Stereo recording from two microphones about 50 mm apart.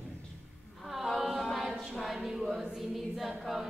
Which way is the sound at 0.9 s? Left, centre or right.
Centre.